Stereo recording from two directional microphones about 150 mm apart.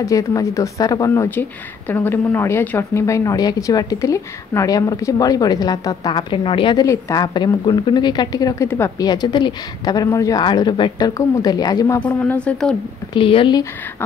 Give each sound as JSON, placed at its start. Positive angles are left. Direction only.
{"t": 0.0, "sound": "speech", "side_deg": 20}
{"t": 12.1, "sound": "speech", "side_deg": 10}
{"t": 13.1, "sound": "speech", "side_deg": 35}